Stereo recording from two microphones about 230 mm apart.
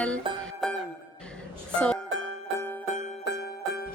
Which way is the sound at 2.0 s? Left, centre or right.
Right.